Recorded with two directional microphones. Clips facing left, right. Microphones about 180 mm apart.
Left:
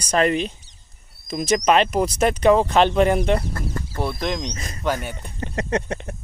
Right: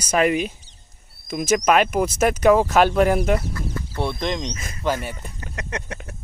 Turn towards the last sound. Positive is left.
turn(degrees=35)  # may be behind; listen again after turning